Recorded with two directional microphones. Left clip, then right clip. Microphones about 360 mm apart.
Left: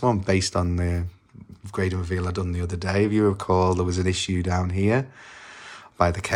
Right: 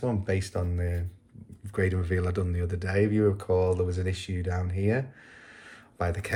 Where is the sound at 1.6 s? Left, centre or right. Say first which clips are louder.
Left 2 dB; centre.